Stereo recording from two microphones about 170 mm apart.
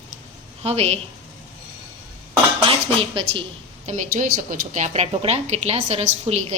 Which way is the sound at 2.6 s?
30° right (ahead or behind).